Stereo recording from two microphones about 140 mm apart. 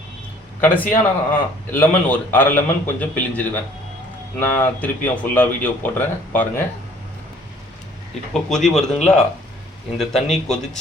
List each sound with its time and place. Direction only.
0.6 s speech: 15° left (ahead or behind)
8.3 s a man's voice: 5° left (ahead or behind)
10.0 s a man's voice: centre (ahead or behind)